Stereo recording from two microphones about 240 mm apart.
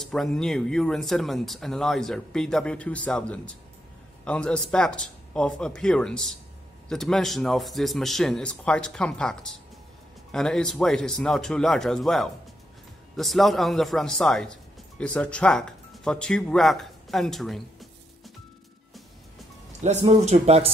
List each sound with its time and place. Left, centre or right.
0.0 s speech: centre
19.8 s speech: right